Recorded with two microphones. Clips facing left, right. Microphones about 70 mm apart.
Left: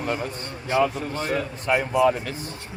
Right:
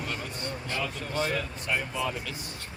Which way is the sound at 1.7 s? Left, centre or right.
Left.